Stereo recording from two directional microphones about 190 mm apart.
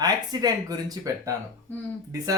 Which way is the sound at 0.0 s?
20° right (ahead or behind).